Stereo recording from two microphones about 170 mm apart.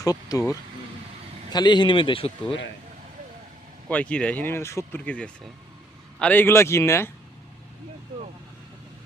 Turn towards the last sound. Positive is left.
turn(degrees=15)  # may be behind; listen again after turning